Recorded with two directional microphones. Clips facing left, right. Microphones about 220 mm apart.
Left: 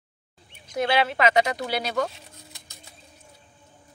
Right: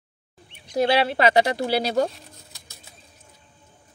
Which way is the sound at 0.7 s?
35° right (ahead or behind).